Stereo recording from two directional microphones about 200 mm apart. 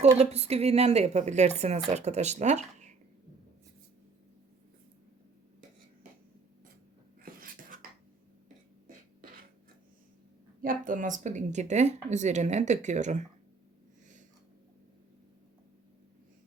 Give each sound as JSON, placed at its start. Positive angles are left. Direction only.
{"t": 0.0, "sound": "speech", "side_deg": -35}
{"t": 7.2, "sound": "a sound", "side_deg": -45}
{"t": 10.6, "sound": "speech", "side_deg": -40}